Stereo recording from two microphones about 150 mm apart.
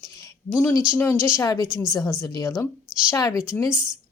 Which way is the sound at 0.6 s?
15° left (ahead or behind).